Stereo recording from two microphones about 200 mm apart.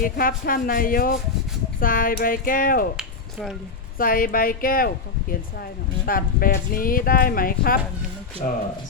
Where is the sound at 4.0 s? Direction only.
45° left (ahead or behind).